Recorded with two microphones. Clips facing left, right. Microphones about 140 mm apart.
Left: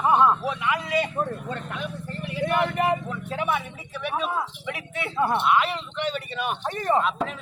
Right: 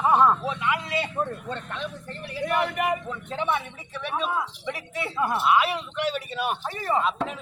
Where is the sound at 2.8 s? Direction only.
30° left (ahead or behind).